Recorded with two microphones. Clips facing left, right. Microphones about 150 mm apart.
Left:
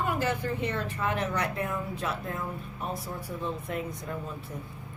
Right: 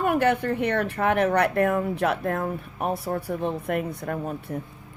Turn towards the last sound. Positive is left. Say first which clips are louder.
# right 7 dB
turn(degrees=-60)  # may be behind; listen again after turning